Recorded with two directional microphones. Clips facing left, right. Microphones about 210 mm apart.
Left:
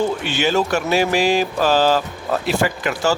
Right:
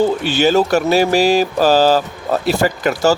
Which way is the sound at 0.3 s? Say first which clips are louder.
Right 5 dB; 35° right (ahead or behind).